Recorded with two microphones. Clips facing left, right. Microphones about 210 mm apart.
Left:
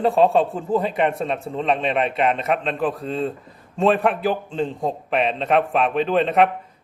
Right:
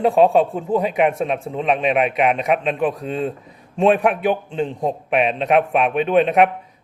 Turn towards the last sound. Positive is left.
turn(degrees=0)  # may be behind; listen again after turning